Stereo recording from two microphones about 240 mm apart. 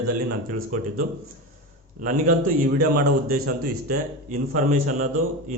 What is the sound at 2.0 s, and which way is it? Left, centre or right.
A man's voice, right.